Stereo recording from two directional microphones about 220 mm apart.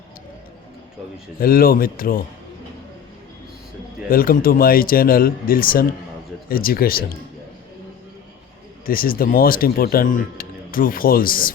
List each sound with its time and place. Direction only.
1.4 s speech: 40° left (ahead or behind)
4.1 s speech: 40° left (ahead or behind)
8.9 s speech: 40° left (ahead or behind)